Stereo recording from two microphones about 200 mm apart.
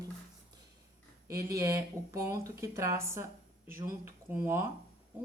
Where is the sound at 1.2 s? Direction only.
15° right (ahead or behind).